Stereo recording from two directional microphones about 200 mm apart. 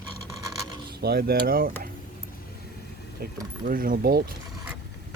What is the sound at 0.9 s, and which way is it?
Speech, 50° right (ahead or behind).